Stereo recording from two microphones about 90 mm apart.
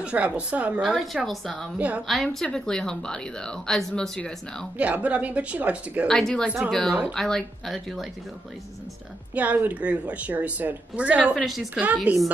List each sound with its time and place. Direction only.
0.0 s a woman's voice: 10° right (ahead or behind)
0.8 s speech: centre (ahead or behind)
1.8 s a woman's voice: 15° right (ahead or behind)
2.3 s speech: 5° left (ahead or behind)
4.7 s a woman's voice: 15° right (ahead or behind)
6.0 s speech: 5° left (ahead or behind)
9.3 s a woman's voice: 15° right (ahead or behind)
11.3 s speech: centre (ahead or behind)
11.8 s a woman's voice: 15° right (ahead or behind)